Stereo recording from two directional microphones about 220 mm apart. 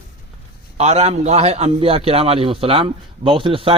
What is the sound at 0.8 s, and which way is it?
A man's voice, 30° right (ahead or behind).